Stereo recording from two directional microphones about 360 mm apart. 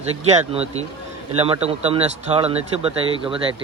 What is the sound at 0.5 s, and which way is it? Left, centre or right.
Speech, centre.